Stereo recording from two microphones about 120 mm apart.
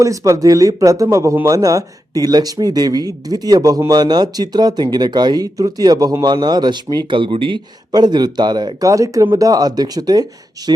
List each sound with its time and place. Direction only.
0.0 s speech: 25° right (ahead or behind)